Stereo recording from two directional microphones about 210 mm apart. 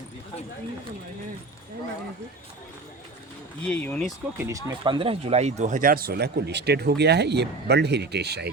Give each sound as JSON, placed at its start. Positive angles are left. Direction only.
{"t": 3.7, "sound": "speech", "side_deg": 5}
{"t": 4.4, "sound": "speech", "side_deg": -10}
{"t": 4.8, "sound": "speech", "side_deg": -25}